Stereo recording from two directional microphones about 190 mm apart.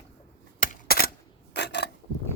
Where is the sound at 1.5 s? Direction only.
60° left (ahead or behind).